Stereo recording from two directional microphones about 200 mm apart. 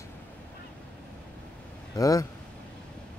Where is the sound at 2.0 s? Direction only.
15° left (ahead or behind).